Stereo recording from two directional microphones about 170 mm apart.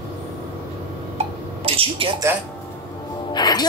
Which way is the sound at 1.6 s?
35° right (ahead or behind).